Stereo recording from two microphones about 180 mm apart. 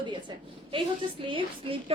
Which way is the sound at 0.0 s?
25° right (ahead or behind).